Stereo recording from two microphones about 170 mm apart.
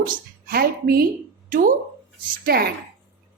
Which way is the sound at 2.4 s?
65° right (ahead or behind).